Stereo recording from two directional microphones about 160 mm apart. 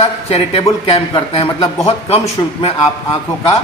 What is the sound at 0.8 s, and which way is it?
Speech, 35° left (ahead or behind).